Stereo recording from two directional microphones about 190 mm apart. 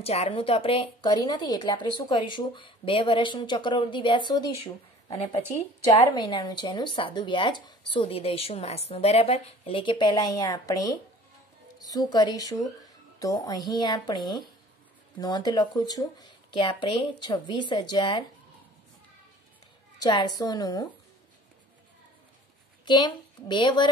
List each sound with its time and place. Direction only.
0.0 s a woman's voice: 30° left (ahead or behind)
6.1 s a woman's voice: 25° left (ahead or behind)
20.0 s a woman's voice: 20° left (ahead or behind)
22.8 s a woman's voice: 25° left (ahead or behind)